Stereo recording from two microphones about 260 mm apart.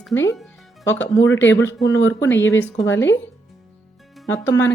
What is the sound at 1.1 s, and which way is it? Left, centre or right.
Speech, left.